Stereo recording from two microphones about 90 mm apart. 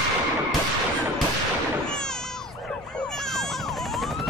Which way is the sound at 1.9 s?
5° left (ahead or behind).